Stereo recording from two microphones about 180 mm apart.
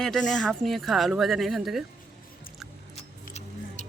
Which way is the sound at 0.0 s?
5° left (ahead or behind).